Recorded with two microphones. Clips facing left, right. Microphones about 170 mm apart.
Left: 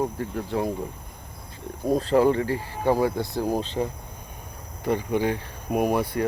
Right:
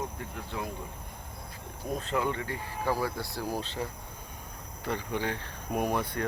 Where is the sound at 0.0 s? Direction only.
35° left (ahead or behind).